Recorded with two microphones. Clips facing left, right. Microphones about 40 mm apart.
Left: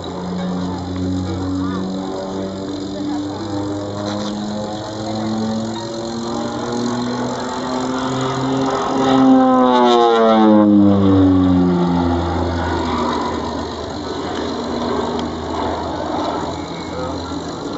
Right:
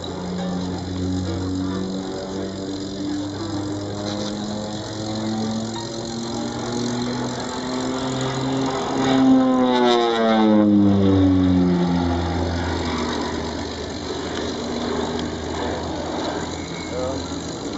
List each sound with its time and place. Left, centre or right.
6.8 s vehicle: left
9.0 s a sound: left
9.8 s vehicle: centre; by 13.3 s left
14.9 s vehicle: left